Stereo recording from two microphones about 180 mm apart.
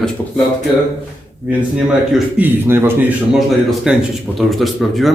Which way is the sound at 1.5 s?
5° right (ahead or behind).